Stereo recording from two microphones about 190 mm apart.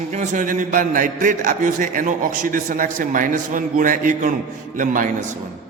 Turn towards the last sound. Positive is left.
turn(degrees=-45)  # may be behind; listen again after turning